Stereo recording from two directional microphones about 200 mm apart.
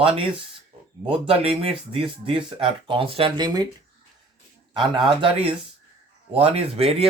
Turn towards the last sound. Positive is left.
turn(degrees=-30)  # may be behind; listen again after turning